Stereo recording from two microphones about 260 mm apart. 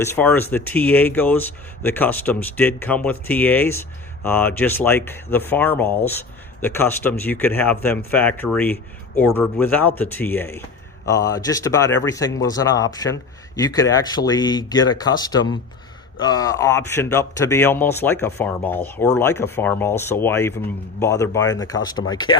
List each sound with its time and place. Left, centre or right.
0.0 s speech: centre